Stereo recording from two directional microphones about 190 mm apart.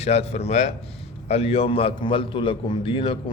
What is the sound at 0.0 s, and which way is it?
A man's voice, 35° left (ahead or behind).